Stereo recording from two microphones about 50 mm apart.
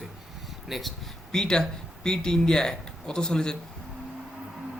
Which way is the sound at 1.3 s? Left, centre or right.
Centre.